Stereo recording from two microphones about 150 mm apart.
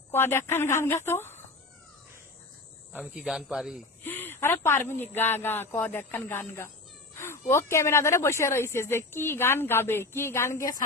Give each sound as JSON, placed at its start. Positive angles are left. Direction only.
{"t": 0.1, "sound": "speech", "side_deg": 15}
{"t": 2.9, "sound": "speech", "side_deg": -5}
{"t": 4.0, "sound": "speech", "side_deg": 15}